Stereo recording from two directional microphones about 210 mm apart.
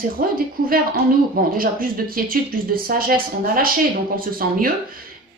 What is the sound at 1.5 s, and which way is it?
Speech, 45° right (ahead or behind).